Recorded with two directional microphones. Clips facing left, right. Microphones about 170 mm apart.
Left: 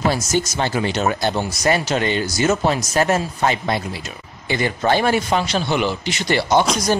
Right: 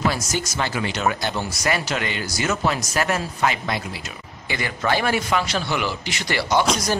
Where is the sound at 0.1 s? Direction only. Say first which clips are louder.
Left 6 dB; 25° left (ahead or behind).